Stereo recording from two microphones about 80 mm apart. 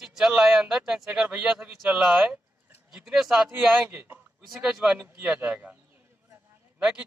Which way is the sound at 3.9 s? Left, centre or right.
Right.